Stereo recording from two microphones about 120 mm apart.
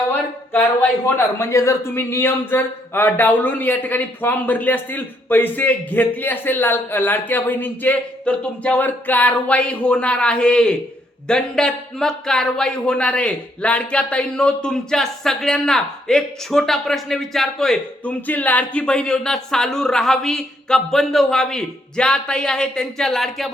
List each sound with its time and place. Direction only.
0.5 s a man's voice: 15° left (ahead or behind)